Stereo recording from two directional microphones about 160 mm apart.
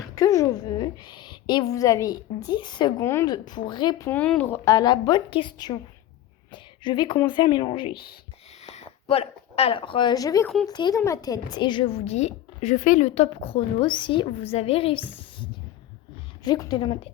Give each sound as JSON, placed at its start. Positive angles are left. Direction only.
{"t": 0.2, "sound": "a woman's voice", "side_deg": 20}
{"t": 3.0, "sound": "a woman's voice", "side_deg": 15}
{"t": 3.3, "sound": "a woman's voice", "side_deg": 25}
{"t": 10.4, "sound": "speech", "side_deg": 5}
{"t": 10.7, "sound": "a woman's voice", "side_deg": 25}
{"t": 16.4, "sound": "a woman's voice", "side_deg": 25}